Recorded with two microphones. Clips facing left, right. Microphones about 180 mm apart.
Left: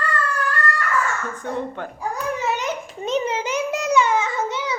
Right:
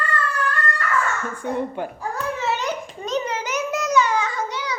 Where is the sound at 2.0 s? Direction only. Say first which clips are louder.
Left 4 dB; 15° left (ahead or behind).